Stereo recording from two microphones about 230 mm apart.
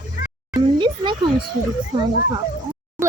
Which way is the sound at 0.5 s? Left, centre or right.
Centre.